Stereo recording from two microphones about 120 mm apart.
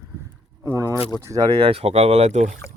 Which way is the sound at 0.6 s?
25° right (ahead or behind).